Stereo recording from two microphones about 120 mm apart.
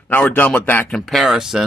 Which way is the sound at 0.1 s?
15° left (ahead or behind).